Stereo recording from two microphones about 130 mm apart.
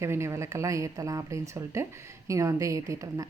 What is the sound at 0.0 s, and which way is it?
A woman's voice, 20° right (ahead or behind).